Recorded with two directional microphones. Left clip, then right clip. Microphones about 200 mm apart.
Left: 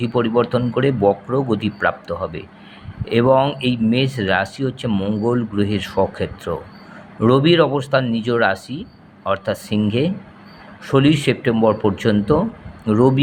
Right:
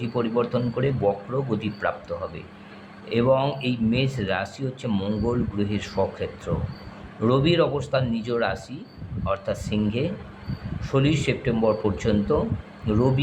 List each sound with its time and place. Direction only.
0.0 s speech: 25° left (ahead or behind)
4.9 s speech: 15° left (ahead or behind)
5.2 s speech: 25° left (ahead or behind)